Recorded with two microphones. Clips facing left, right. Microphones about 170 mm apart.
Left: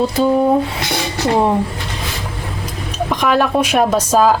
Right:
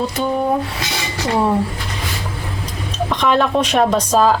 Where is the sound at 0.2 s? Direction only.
35° left (ahead or behind).